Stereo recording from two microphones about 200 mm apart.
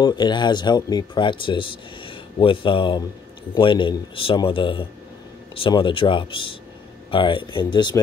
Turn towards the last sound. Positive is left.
turn(degrees=20)  # may be behind; listen again after turning